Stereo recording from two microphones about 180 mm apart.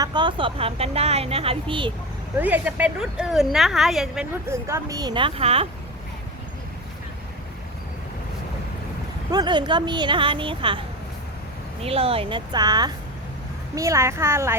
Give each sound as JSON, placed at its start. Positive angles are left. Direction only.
{"t": 0.0, "sound": "speech", "side_deg": -25}
{"t": 2.4, "sound": "speech", "side_deg": -10}
{"t": 4.4, "sound": "speech", "side_deg": -15}
{"t": 9.3, "sound": "a woman's voice", "side_deg": -25}